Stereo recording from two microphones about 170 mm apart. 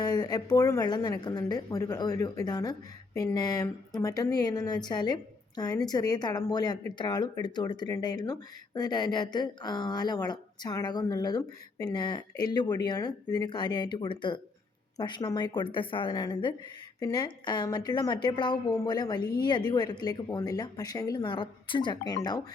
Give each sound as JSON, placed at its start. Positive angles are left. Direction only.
{"t": 0.0, "sound": "a woman's voice", "side_deg": 25}
{"t": 19.2, "sound": "speech", "side_deg": 65}
{"t": 19.5, "sound": "a woman's voice", "side_deg": 25}